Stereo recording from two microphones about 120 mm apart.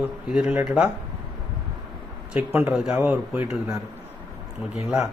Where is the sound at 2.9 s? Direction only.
15° right (ahead or behind).